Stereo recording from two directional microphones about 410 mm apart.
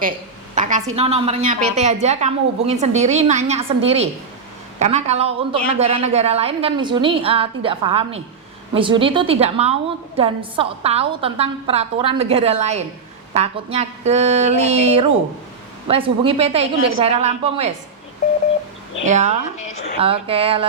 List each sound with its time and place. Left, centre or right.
0.5 s a woman's voice: centre
19.0 s a woman's voice: centre